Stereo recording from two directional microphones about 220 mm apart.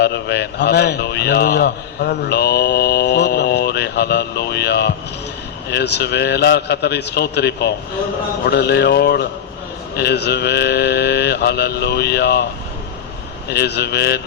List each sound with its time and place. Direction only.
0.0 s a man's voice: 50° left (ahead or behind)
13.5 s a man's voice: 50° left (ahead or behind)